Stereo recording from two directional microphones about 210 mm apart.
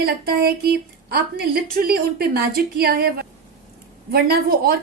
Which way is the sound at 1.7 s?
45° right (ahead or behind).